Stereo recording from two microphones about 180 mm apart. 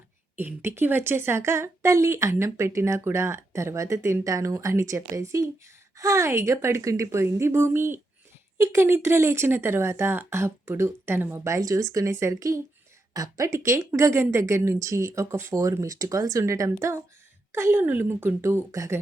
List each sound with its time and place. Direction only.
0.3 s a woman's voice: 10° right (ahead or behind)